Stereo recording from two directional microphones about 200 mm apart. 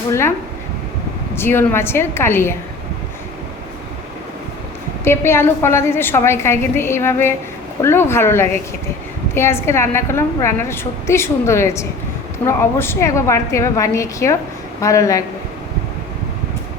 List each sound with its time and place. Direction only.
0.1 s a woman's voice: 10° left (ahead or behind)
1.4 s a woman's voice: 10° left (ahead or behind)
5.0 s a woman's voice: 10° left (ahead or behind)